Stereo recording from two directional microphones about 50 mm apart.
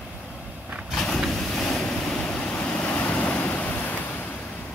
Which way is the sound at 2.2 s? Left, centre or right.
Left.